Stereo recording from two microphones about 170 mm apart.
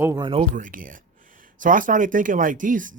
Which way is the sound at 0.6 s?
50° right (ahead or behind).